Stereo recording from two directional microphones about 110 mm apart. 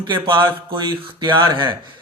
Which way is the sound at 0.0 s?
45° right (ahead or behind).